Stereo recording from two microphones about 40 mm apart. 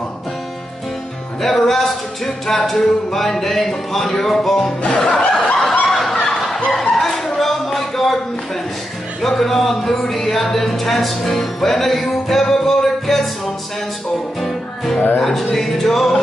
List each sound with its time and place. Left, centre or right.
1.4 s music: centre
4.8 s music: left
5.9 s fowl: centre
6.7 s music: centre
9.2 s speech: centre
15.2 s music: centre